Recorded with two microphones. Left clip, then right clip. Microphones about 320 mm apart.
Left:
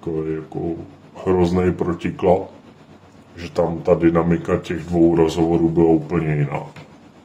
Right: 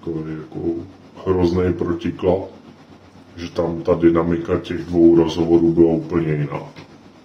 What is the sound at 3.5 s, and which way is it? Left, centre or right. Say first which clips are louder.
Speech: left 2 dB; left.